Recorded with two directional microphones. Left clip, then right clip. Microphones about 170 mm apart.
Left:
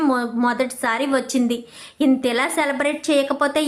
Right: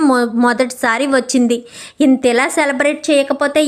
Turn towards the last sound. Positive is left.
turn(degrees=-25)  # may be behind; listen again after turning